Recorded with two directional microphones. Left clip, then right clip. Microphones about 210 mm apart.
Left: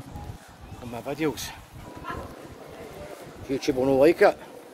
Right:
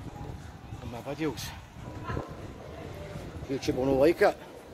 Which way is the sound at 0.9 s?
25° left (ahead or behind).